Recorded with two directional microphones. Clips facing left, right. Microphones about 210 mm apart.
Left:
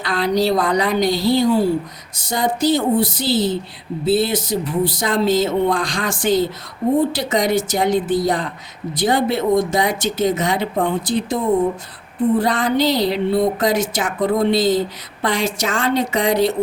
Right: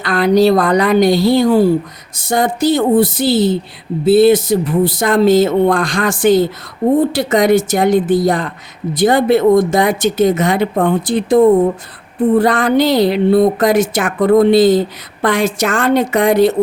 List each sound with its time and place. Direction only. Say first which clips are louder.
0.0 s speech: right 7 dB; 55° right (ahead or behind)